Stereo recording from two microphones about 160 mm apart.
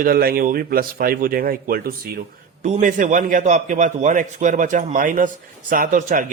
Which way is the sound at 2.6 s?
50° right (ahead or behind).